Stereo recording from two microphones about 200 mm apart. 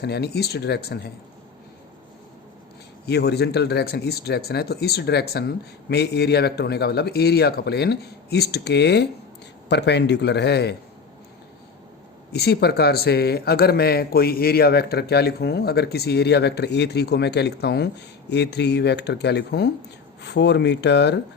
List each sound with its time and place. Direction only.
0.0 s speech: 55° left (ahead or behind)
3.1 s speech: 55° left (ahead or behind)
12.3 s speech: 55° left (ahead or behind)